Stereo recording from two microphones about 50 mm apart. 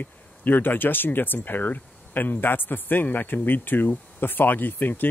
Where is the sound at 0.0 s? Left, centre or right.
Left.